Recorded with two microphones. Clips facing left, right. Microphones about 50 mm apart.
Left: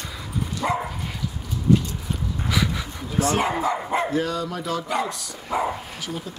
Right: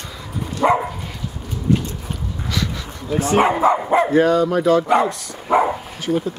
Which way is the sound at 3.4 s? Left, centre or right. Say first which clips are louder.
Right 8 dB; right.